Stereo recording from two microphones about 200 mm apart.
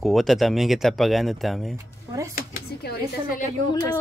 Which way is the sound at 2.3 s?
50° left (ahead or behind).